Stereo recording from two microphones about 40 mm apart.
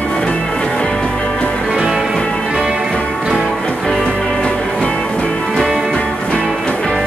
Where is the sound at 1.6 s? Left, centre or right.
Centre.